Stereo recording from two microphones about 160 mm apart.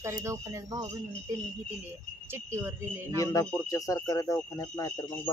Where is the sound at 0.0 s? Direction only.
20° right (ahead or behind).